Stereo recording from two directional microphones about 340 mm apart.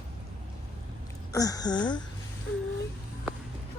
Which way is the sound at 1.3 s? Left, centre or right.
Centre.